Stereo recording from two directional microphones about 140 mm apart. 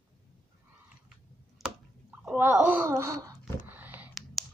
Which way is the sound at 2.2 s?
10° right (ahead or behind).